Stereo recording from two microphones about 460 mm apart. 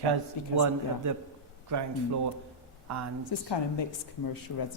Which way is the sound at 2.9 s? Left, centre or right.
Right.